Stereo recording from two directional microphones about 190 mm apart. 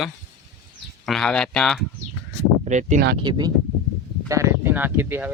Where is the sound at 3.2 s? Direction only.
20° right (ahead or behind).